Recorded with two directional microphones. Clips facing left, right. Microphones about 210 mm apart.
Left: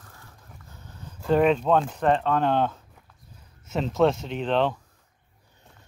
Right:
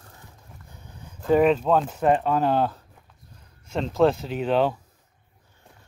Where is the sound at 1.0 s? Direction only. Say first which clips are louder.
Right 2 dB; 5° right (ahead or behind).